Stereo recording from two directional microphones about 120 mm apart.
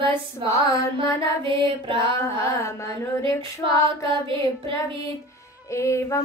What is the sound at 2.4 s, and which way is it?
Child singing, 25° left (ahead or behind).